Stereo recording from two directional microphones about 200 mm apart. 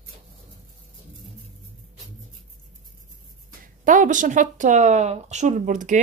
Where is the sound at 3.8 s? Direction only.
40° right (ahead or behind).